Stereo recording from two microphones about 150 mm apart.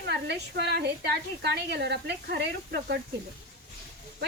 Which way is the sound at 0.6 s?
90° right.